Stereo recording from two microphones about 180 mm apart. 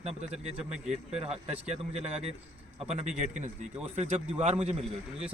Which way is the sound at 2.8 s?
35° right (ahead or behind).